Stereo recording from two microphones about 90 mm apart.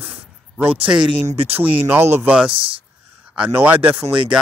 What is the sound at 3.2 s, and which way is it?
Speech, 15° right (ahead or behind).